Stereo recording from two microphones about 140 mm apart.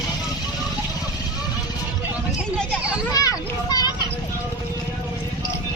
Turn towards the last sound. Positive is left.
turn(degrees=30)  # may be behind; listen again after turning